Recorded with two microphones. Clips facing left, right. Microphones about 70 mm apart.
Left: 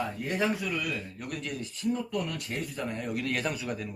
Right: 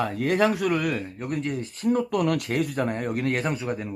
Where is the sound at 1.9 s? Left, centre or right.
Right.